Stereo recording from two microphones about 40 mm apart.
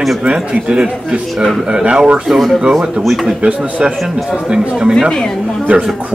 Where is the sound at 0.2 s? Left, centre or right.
Right.